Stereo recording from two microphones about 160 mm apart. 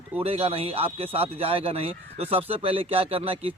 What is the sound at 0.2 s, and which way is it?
A man's voice, 35° right (ahead or behind).